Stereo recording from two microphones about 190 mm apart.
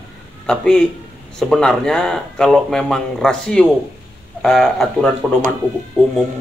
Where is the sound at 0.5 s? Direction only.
5° left (ahead or behind).